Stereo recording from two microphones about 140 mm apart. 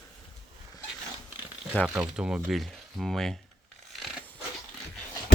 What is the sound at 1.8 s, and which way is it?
Speech, 5° right (ahead or behind).